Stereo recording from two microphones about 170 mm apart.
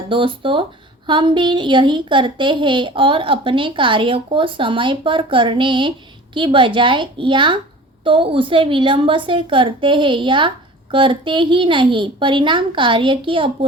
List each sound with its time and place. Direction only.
0.1 s a woman's voice: 30° right (ahead or behind)